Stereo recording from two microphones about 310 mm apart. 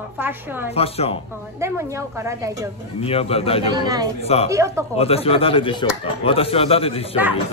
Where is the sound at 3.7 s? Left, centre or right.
Centre.